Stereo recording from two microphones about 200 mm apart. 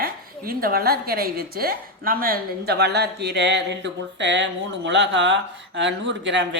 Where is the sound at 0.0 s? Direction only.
50° right (ahead or behind).